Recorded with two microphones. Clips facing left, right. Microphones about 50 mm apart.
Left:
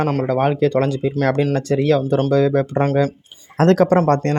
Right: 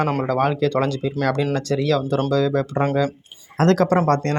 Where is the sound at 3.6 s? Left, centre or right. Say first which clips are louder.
Left 3 dB; left.